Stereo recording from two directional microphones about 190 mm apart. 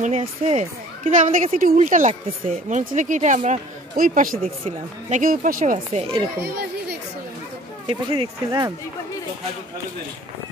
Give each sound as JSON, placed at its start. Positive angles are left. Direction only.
{"t": 0.0, "sound": "speech", "side_deg": -35}
{"t": 7.8, "sound": "speech", "side_deg": -30}
{"t": 8.5, "sound": "speech", "side_deg": -15}